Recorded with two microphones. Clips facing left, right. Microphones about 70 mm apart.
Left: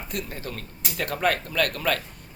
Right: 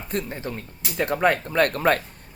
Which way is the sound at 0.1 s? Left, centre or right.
Right.